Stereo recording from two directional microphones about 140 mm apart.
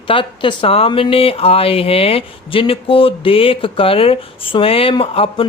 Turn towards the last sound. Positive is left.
turn(degrees=40)  # may be behind; listen again after turning